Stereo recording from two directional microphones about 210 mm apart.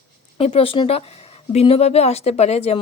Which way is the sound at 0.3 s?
25° left (ahead or behind).